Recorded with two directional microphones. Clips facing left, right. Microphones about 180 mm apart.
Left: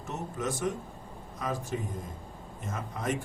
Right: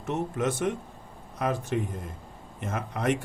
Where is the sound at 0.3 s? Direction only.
60° right (ahead or behind).